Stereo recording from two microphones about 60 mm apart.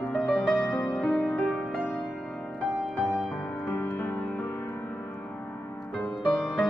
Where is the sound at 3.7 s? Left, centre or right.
Left.